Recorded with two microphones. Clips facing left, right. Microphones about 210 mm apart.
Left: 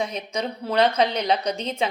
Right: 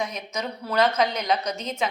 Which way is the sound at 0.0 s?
30° left (ahead or behind).